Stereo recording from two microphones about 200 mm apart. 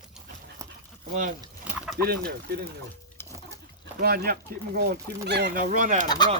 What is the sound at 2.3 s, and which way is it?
Speech, 50° right (ahead or behind).